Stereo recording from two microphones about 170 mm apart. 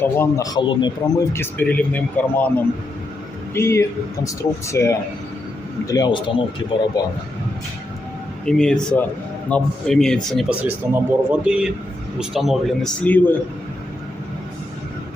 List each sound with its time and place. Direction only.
0.0 s speech: 15° left (ahead or behind)
3.5 s a man's voice: 15° left (ahead or behind)
8.4 s a man's voice: 5° left (ahead or behind)
10.6 s a man's voice: 10° right (ahead or behind); by 13.3 s 10° left (ahead or behind)